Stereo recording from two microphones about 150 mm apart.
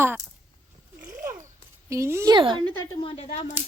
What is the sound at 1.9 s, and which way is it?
Speech, 20° right (ahead or behind).